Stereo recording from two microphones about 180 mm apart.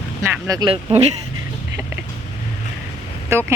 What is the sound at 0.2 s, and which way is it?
Speech, 15° right (ahead or behind).